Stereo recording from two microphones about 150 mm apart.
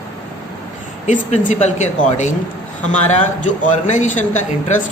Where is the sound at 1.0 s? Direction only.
55° left (ahead or behind).